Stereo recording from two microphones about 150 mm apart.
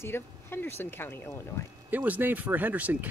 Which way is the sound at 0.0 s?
15° left (ahead or behind).